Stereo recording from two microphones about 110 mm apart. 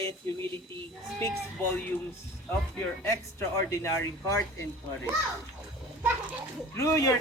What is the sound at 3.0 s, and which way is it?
Speech, 25° left (ahead or behind).